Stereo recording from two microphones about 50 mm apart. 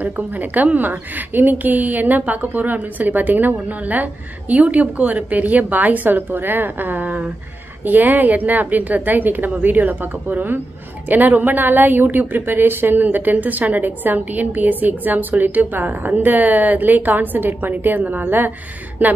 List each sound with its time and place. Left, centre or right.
0.0 s a woman's voice: right